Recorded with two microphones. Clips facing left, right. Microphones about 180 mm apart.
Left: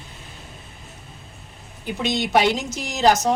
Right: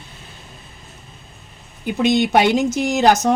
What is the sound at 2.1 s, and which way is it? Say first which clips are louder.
Speech: right 3 dB; 55° right (ahead or behind).